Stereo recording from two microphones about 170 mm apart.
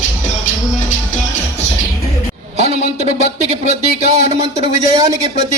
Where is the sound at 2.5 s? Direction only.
40° right (ahead or behind).